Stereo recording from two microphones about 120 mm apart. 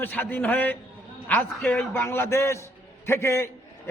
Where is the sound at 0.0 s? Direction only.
15° left (ahead or behind).